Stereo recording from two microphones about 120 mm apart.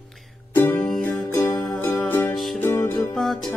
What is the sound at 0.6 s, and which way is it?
Music, 15° left (ahead or behind).